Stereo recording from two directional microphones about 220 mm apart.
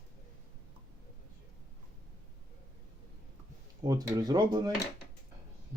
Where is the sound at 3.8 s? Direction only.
15° right (ahead or behind).